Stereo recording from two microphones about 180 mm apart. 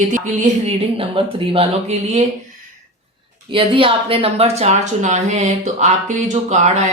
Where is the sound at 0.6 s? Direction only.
30° right (ahead or behind).